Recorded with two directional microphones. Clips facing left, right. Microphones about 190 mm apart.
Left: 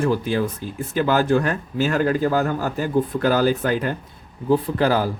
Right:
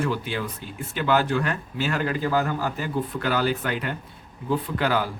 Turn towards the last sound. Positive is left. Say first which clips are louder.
# left 5 dB
turn(degrees=40)  # may be behind; listen again after turning